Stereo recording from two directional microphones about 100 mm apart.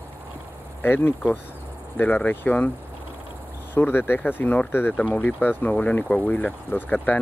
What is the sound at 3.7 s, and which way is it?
Speech, 20° left (ahead or behind).